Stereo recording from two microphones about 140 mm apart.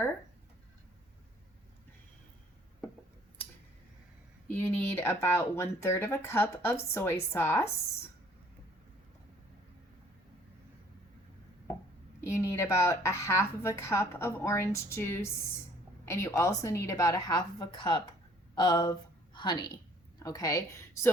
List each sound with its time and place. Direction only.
4.4 s speech: 15° left (ahead or behind)
12.2 s a woman's voice: 20° left (ahead or behind)